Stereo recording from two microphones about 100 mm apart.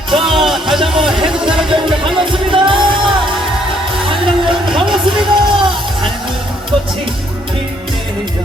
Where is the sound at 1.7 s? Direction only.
60° right (ahead or behind).